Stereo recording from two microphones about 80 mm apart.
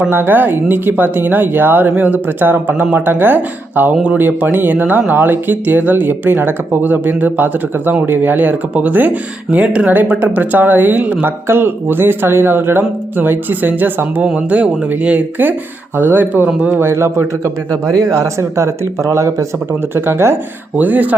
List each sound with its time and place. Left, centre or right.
0.1 s a man's voice: right